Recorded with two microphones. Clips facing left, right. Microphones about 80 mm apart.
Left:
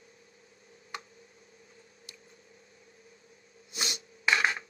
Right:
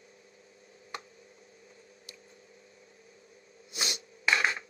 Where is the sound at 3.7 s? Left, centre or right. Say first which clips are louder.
Even; left.